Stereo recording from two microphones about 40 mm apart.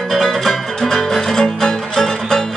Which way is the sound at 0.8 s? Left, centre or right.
Centre.